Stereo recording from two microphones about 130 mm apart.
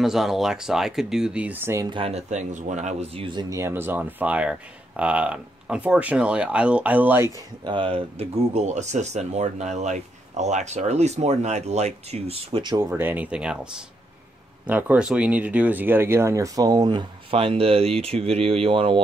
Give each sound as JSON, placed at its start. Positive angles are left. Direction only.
{"t": 0.0, "sound": "speech", "side_deg": -5}
{"t": 1.9, "sound": "speech", "side_deg": -45}
{"t": 7.6, "sound": "speech", "side_deg": -40}
{"t": 12.9, "sound": "speech", "side_deg": -15}
{"t": 17.3, "sound": "speech", "side_deg": -45}